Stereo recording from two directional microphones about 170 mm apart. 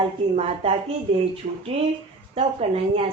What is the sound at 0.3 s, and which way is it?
Speech, 35° right (ahead or behind).